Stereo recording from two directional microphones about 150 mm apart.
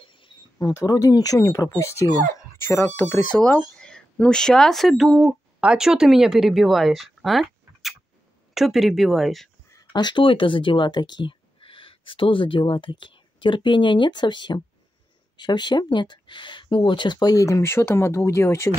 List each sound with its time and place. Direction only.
0.0 s speech: 35° left (ahead or behind); by 9.5 s centre (ahead or behind)
9.7 s speech: 25° left (ahead or behind)